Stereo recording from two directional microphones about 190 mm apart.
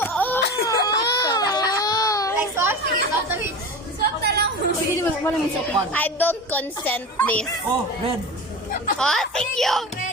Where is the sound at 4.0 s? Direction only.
55° right (ahead or behind).